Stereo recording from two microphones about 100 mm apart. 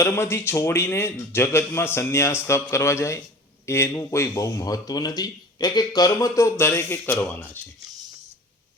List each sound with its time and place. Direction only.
0.0 s a man's voice: 25° left (ahead or behind)